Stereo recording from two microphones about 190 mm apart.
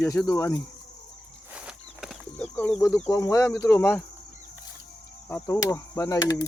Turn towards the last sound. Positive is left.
turn(degrees=20)  # may be behind; listen again after turning